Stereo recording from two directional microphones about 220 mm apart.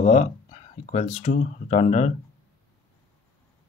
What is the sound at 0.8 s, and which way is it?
Speech, 30° left (ahead or behind).